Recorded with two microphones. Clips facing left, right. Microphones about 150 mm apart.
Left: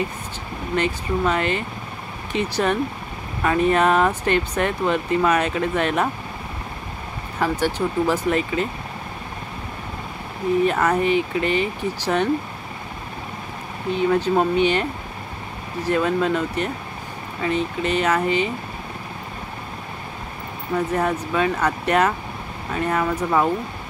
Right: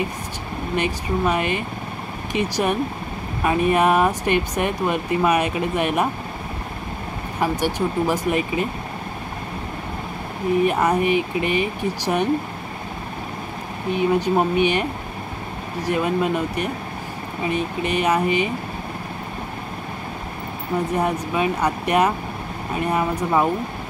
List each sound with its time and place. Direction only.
0.7 s speech: 15° right (ahead or behind)
7.3 s speech: 15° right (ahead or behind)
10.6 s speech: 15° right (ahead or behind)
13.9 s speech: 15° right (ahead or behind)
20.9 s speech: 15° right (ahead or behind)